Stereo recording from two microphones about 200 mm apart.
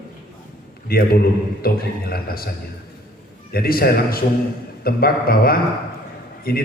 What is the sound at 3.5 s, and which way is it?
A man's voice, 50° left (ahead or behind).